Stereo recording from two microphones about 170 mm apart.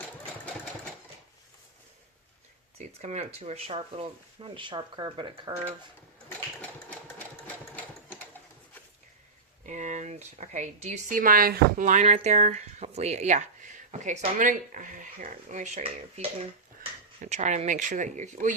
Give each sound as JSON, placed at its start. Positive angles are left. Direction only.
{"t": 2.7, "sound": "speech", "side_deg": -40}
{"t": 7.2, "sound": "sewing machine", "side_deg": 10}
{"t": 9.6, "sound": "speech", "side_deg": -45}
{"t": 17.2, "sound": "speech", "side_deg": -45}